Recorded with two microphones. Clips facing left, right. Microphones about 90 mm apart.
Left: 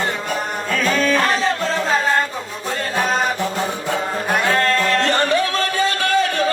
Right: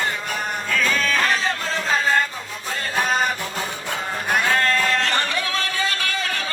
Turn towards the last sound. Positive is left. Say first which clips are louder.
# left 9 dB
turn(degrees=35)  # may be behind; listen again after turning